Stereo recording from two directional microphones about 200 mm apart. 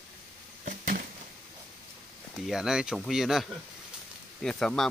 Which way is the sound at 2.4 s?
Centre (ahead or behind).